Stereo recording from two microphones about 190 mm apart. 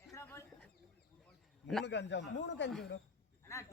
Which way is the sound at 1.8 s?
65° left (ahead or behind).